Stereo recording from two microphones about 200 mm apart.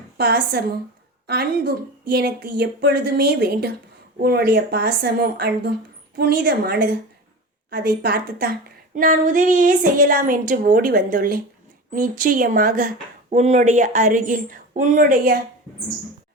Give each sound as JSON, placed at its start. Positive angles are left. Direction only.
{"t": 0.2, "sound": "a woman's voice", "side_deg": -55}